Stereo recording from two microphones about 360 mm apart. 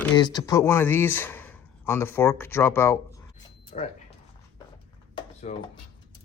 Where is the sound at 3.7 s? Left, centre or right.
Left.